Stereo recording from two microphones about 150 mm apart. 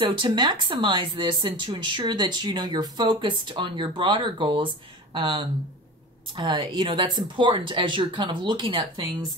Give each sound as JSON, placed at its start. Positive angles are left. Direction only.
{"t": 0.2, "sound": "speech", "side_deg": -30}